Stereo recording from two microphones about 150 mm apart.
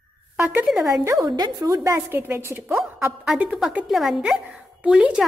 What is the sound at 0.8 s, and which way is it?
A woman's voice, 20° right (ahead or behind).